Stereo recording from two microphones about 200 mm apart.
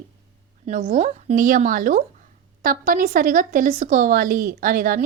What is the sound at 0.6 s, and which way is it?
Speech, 40° right (ahead or behind).